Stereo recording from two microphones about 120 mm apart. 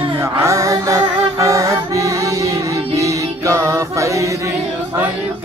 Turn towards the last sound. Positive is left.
turn(degrees=-25)  # may be behind; listen again after turning